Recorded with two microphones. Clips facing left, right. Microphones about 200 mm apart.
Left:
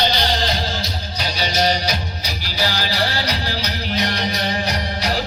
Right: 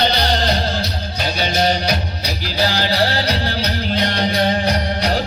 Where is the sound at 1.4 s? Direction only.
50° right (ahead or behind).